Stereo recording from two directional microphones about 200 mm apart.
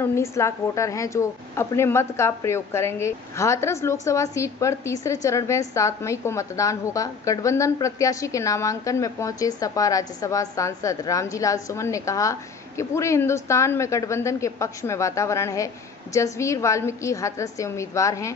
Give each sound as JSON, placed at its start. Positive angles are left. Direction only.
{"t": 0.0, "sound": "a woman's voice", "side_deg": 15}